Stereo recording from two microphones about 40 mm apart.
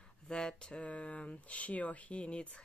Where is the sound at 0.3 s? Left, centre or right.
Centre.